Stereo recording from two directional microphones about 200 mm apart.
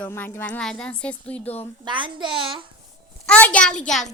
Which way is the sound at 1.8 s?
25° right (ahead or behind).